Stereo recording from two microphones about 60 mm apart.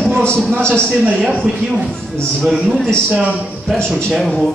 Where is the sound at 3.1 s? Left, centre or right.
Centre.